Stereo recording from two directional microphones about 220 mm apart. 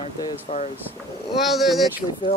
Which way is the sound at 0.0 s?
30° left (ahead or behind).